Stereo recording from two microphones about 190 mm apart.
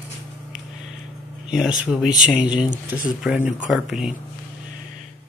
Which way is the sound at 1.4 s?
5° right (ahead or behind).